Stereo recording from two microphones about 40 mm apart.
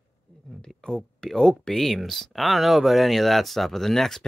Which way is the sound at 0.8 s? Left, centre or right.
Centre.